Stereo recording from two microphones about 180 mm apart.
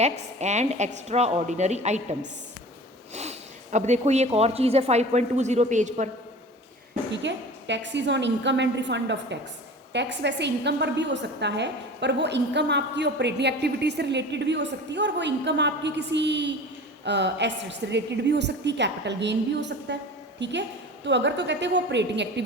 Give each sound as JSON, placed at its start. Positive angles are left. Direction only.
{"t": 0.0, "sound": "speech", "side_deg": -40}
{"t": 3.2, "sound": "speech", "side_deg": -40}
{"t": 7.1, "sound": "a woman's voice", "side_deg": -80}